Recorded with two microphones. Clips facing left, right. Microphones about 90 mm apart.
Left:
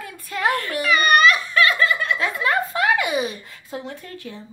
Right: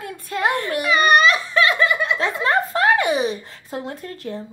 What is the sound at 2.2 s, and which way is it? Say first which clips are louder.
Speech: right 2 dB; 30° right (ahead or behind).